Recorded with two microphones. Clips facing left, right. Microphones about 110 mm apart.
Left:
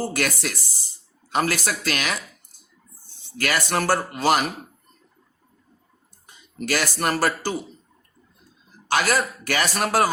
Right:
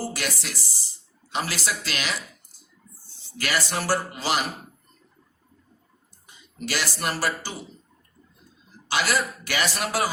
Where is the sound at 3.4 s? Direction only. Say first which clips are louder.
Left 4 dB; 50° left (ahead or behind).